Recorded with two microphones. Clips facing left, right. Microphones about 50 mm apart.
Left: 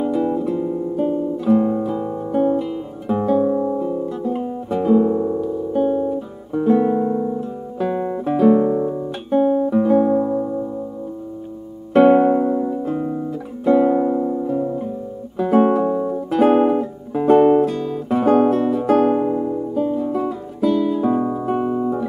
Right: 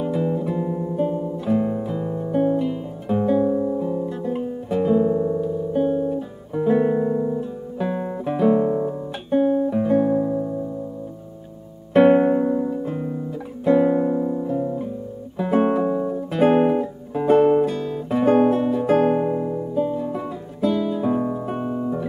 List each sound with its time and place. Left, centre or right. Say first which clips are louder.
0.0 s guitar: left 3 dB; centre
0.4 s guitar: left 3 dB; centre
3.5 s music: left 2 dB; centre
3.8 s music: left 2 dB; centre
4.7 s guitar: left 3 dB; centre
7.0 s music: left 1 dB; centre
8.3 s guitar: left 4 dB; centre
8.5 s guitar: left 3 dB; centre
9.3 s guitar: left 2 dB; centre
10.1 s music: left 3 dB; centre
11.9 s music: left 2 dB; centre
19.7 s guitar: left 3 dB; centre
21.6 s music: left 4 dB; left